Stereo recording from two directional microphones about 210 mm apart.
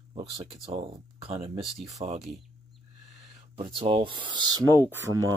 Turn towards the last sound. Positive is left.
turn(degrees=-15)  # may be behind; listen again after turning